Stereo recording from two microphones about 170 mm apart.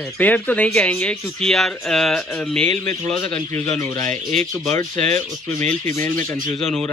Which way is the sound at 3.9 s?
45° right (ahead or behind).